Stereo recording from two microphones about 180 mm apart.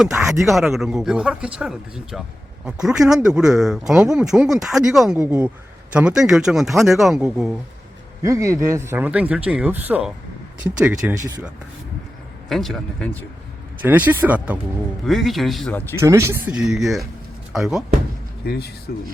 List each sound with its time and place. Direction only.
0.0 s speech: centre (ahead or behind)
8.2 s a man's voice: 15° right (ahead or behind)
11.1 s a man's voice: 15° right (ahead or behind)
12.5 s speech: centre (ahead or behind)
13.8 s a man's voice: 10° right (ahead or behind); by 16.0 s 5° left (ahead or behind)
16.0 s a man's voice: 15° right (ahead or behind)
16.6 s speech: centre (ahead or behind)
18.4 s speech: 60° left (ahead or behind)